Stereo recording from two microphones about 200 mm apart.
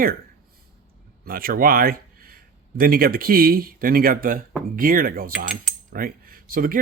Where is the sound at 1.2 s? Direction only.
45° right (ahead or behind).